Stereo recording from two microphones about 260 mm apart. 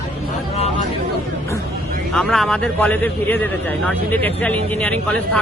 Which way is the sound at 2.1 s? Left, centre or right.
Centre.